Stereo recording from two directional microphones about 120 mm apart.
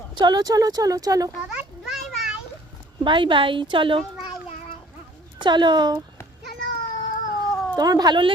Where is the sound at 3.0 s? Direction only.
40° right (ahead or behind).